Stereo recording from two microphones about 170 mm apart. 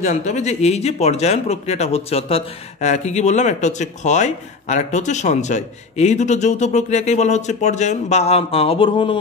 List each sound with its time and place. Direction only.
0.0 s speech: 45° left (ahead or behind)